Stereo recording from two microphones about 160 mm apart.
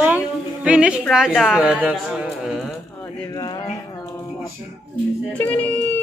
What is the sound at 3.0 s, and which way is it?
Speech, 25° left (ahead or behind).